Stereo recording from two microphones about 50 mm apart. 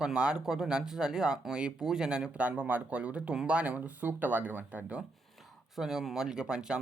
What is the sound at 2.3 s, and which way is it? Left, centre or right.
Speech, right.